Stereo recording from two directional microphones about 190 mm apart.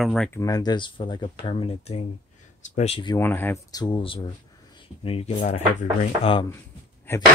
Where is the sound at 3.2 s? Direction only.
10° left (ahead or behind); by 6.4 s 35° left (ahead or behind).